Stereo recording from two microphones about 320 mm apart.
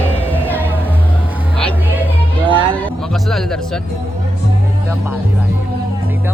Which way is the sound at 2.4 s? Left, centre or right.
Centre.